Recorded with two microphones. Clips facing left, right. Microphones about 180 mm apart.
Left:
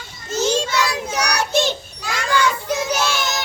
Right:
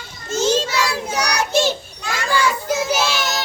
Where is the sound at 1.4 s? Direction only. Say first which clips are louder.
Right 2 dB; 5° right (ahead or behind).